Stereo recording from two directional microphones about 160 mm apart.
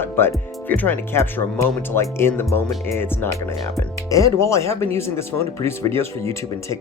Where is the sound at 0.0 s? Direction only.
15° left (ahead or behind).